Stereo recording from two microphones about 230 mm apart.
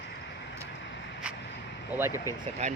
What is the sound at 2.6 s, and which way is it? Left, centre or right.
Speech, right.